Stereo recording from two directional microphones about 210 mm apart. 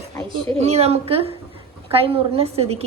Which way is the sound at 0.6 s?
30° right (ahead or behind).